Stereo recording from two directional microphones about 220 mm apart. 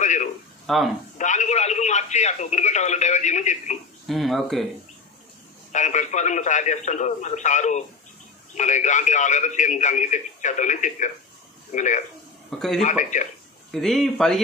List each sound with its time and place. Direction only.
0.0 s a sound: 35° left (ahead or behind)
0.7 s speech: centre (ahead or behind)
1.1 s speech: 35° left (ahead or behind)
4.1 s speech: centre (ahead or behind)
5.7 s a man's voice: 35° left (ahead or behind)
12.4 s a man's voice: centre (ahead or behind)
12.8 s a man's voice: 35° left (ahead or behind)
13.7 s speech: centre (ahead or behind)